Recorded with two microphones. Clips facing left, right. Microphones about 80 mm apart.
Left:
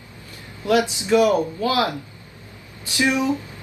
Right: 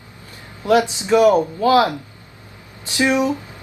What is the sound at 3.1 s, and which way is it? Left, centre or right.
Speech, right.